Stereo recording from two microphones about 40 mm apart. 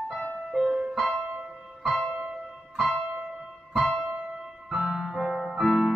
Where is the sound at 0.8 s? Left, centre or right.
Centre.